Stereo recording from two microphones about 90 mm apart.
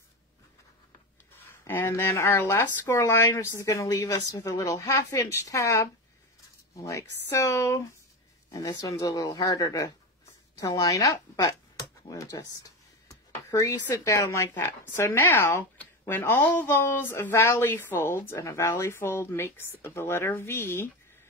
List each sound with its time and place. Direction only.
1.6 s a woman's voice: 30° left (ahead or behind)